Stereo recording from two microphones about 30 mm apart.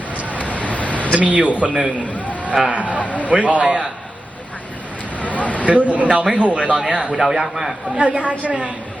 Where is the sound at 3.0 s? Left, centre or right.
Left.